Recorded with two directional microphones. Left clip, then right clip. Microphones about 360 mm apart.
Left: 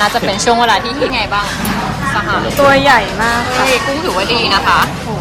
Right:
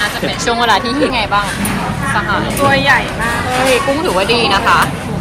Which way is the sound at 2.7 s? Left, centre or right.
Left.